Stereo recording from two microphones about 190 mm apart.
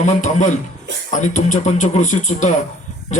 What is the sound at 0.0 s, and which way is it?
Speech, 40° left (ahead or behind).